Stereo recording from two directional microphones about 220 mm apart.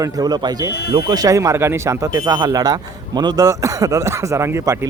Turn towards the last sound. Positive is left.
turn(degrees=-10)  # may be behind; listen again after turning